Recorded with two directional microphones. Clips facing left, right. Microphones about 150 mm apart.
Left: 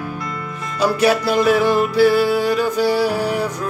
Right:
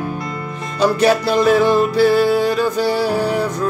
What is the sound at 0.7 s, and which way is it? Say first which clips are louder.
Music: right 2 dB; 5° left (ahead or behind).